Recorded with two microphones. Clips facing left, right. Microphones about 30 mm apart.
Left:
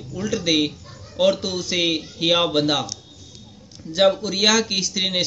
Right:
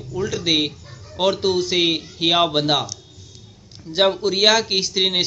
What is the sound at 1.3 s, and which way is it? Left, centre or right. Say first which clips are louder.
Speech: right 5 dB; right.